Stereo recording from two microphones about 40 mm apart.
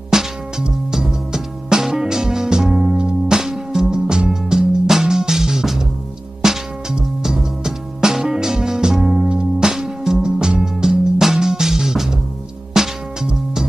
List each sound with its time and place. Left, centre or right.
0.1 s music: centre